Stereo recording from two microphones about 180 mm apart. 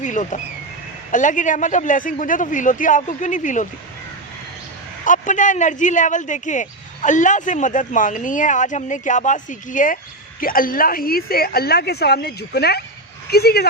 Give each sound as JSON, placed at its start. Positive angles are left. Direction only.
{"t": 0.0, "sound": "speech", "side_deg": 45}
{"t": 5.0, "sound": "speech", "side_deg": 45}